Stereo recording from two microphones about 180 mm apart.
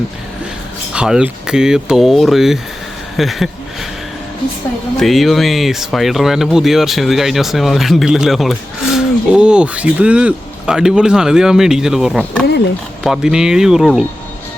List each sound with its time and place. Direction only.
0.9 s speech: 5° right (ahead or behind)
4.9 s speech: centre (ahead or behind)